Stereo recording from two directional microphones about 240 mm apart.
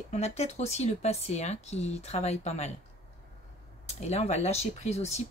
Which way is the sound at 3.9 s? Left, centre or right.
Left.